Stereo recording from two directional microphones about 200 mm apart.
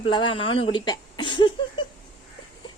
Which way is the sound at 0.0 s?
25° left (ahead or behind).